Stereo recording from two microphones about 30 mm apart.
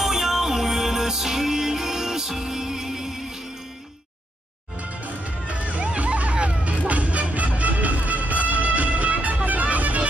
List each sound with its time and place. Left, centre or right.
0.0 s music: centre
4.8 s music: right